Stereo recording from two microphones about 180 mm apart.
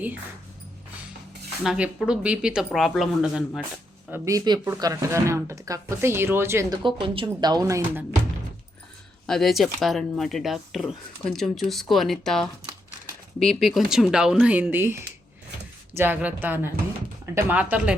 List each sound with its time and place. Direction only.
1.6 s speech: 5° right (ahead or behind)
4.1 s speech: 20° right (ahead or behind)
6.7 s speech: 30° right (ahead or behind)
9.2 s speech: centre (ahead or behind)
16.0 s speech: 10° right (ahead or behind)